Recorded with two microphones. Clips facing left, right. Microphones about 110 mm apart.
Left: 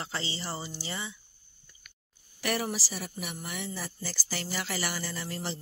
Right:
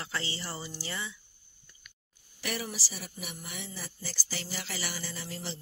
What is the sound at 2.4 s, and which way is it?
A woman's voice, 55° left (ahead or behind).